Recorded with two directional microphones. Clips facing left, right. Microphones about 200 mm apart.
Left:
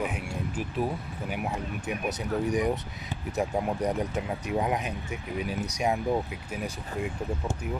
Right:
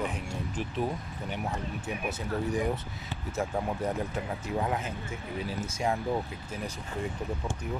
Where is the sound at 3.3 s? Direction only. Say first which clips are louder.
Left 3 dB; 20° left (ahead or behind).